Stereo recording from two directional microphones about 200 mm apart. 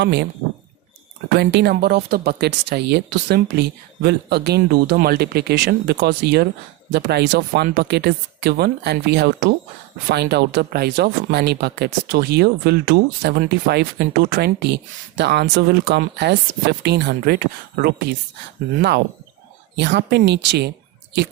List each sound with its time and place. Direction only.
0.0 s speech: 60° right (ahead or behind)
1.3 s speech: 55° right (ahead or behind)